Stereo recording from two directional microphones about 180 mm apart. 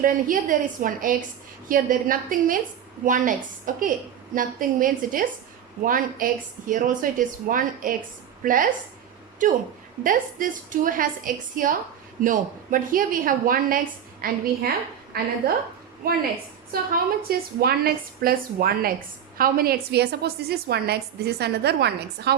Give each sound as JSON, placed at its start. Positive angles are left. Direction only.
{"t": 0.0, "sound": "a woman's voice", "side_deg": -50}